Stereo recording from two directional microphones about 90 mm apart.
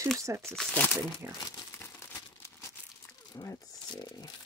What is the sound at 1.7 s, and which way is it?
Crumpling, 25° left (ahead or behind).